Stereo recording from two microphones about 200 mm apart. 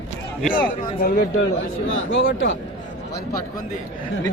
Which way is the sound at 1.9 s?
70° left (ahead or behind).